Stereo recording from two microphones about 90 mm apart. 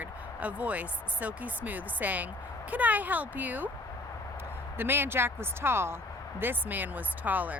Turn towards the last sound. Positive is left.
turn(degrees=-20)  # may be behind; listen again after turning